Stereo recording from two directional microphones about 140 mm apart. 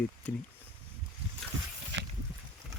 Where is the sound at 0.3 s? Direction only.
10° left (ahead or behind).